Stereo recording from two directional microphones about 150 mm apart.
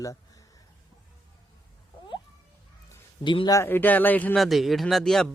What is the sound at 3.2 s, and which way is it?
Speech, 30° left (ahead or behind).